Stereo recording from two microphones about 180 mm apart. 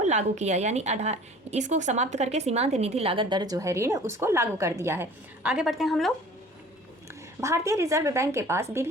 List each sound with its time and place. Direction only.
0.0 s a woman's voice: 40° right (ahead or behind); by 6.1 s centre (ahead or behind)
7.1 s a woman's voice: 15° right (ahead or behind)